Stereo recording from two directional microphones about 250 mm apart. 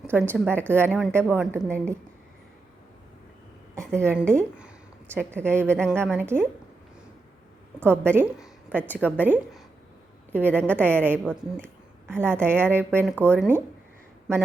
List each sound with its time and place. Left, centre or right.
0.0 s a woman's voice: centre
3.8 s a woman's voice: centre
7.9 s a woman's voice: centre